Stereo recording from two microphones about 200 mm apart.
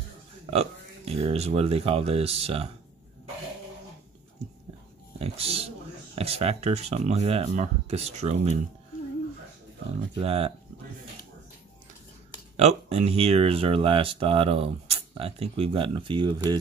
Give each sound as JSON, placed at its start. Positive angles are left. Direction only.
{"t": 0.5, "sound": "speech", "side_deg": -30}
{"t": 5.2, "sound": "speech", "side_deg": -30}
{"t": 10.1, "sound": "speech", "side_deg": -30}
{"t": 12.5, "sound": "speech", "side_deg": -30}